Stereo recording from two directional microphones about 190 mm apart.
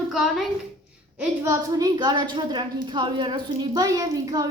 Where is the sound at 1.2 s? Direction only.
15° right (ahead or behind).